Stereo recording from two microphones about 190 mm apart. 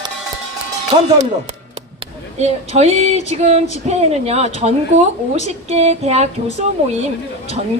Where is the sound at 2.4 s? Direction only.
35° right (ahead or behind).